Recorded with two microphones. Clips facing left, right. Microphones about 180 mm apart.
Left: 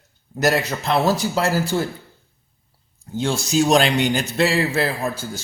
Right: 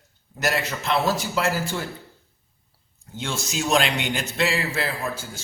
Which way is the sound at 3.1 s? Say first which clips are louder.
Left 9 dB; 35° left (ahead or behind).